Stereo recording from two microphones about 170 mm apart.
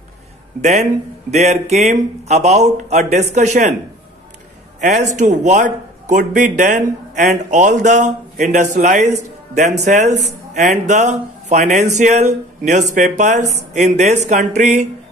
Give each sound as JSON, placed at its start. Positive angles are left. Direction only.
{"t": 0.6, "sound": "speech", "side_deg": -45}
{"t": 5.0, "sound": "speech", "side_deg": -45}